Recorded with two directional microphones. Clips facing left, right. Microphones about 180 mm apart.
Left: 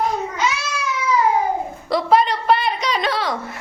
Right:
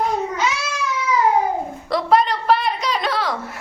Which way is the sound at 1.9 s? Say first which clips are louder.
Left 1 dB; centre (ahead or behind).